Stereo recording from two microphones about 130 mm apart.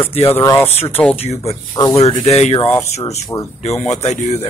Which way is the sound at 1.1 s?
55° left (ahead or behind).